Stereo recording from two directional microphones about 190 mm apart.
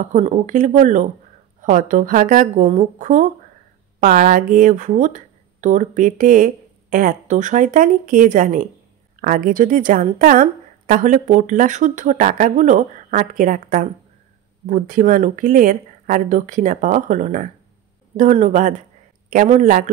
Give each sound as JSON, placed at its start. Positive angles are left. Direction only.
{"t": 0.0, "sound": "a woman's voice", "side_deg": -40}